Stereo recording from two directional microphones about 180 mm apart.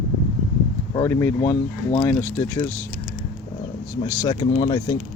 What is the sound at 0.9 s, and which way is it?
Speech, 15° left (ahead or behind).